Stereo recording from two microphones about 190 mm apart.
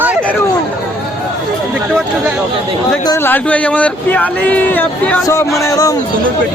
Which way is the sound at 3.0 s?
15° left (ahead or behind).